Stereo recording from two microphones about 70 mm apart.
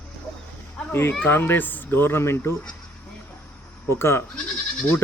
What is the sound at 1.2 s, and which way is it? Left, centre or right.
Speech, left.